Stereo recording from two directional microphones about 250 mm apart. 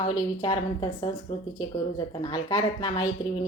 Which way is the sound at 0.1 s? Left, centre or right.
Centre.